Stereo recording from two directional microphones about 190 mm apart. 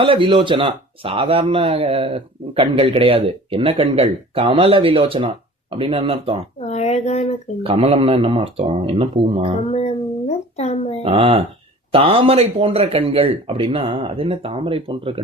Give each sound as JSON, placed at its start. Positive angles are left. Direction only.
{"t": 0.0, "sound": "speech", "side_deg": -25}
{"t": 6.6, "sound": "a sound", "side_deg": 35}
{"t": 7.6, "sound": "speech", "side_deg": -30}
{"t": 9.6, "sound": "speech", "side_deg": 35}
{"t": 11.0, "sound": "speech", "side_deg": -30}